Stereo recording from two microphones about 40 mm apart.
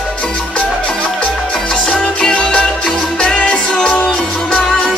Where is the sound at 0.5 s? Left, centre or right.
Left.